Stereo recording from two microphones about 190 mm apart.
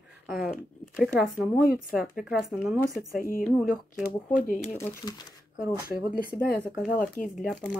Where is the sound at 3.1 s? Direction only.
50° left (ahead or behind).